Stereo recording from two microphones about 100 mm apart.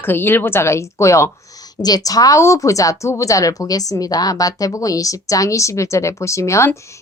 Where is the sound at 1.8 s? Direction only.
40° left (ahead or behind).